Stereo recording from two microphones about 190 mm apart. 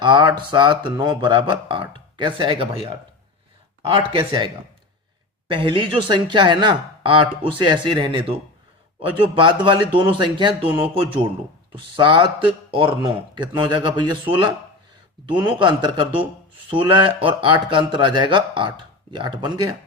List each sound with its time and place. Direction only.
0.0 s speech: 25° right (ahead or behind)